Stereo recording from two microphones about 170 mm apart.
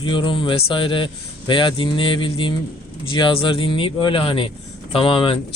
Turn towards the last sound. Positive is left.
turn(degrees=30)  # may be behind; listen again after turning